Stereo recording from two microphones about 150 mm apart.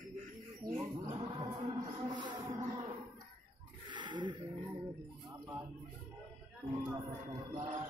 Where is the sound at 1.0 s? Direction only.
25° right (ahead or behind).